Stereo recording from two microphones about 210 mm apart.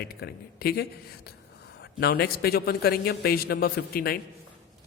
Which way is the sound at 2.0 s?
50° left (ahead or behind).